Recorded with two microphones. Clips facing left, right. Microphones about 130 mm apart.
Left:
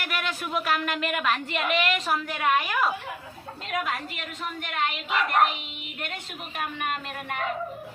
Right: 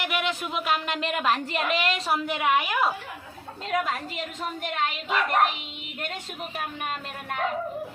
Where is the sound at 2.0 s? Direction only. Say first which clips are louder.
Right 1 dB; 20° right (ahead or behind).